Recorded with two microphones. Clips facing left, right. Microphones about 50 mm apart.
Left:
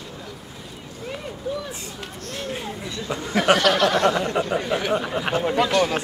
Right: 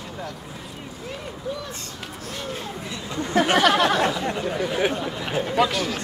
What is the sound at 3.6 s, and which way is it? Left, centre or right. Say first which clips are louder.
Speech: right 1 dB; centre.